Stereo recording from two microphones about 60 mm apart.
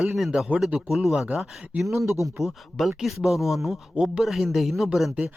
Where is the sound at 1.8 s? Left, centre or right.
Right.